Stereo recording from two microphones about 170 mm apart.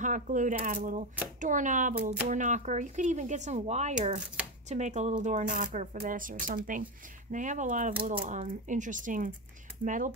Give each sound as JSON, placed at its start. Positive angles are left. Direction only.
{"t": 0.0, "sound": "speech", "side_deg": -50}